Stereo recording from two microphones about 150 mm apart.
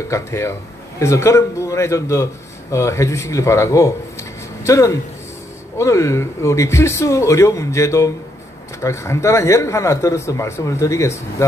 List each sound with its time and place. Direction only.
0.1 s speech: 20° left (ahead or behind)